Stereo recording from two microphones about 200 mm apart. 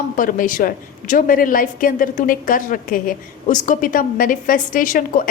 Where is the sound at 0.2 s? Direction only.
40° left (ahead or behind).